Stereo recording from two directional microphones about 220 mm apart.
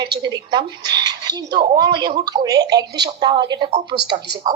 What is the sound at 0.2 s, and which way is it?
A woman's voice, 20° right (ahead or behind).